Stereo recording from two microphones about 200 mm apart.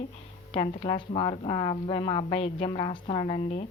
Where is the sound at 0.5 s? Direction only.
25° left (ahead or behind).